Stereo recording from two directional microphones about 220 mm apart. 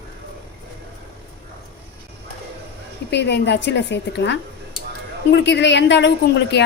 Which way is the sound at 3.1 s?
50° left (ahead or behind).